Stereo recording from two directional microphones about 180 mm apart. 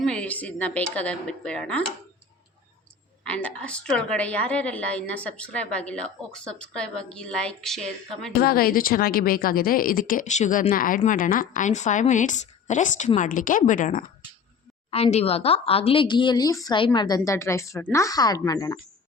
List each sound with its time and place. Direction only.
0.0 s speech: 5° left (ahead or behind)
3.2 s a woman's voice: 5° left (ahead or behind)
8.4 s a woman's voice: 55° left (ahead or behind)
14.8 s speech: 35° left (ahead or behind)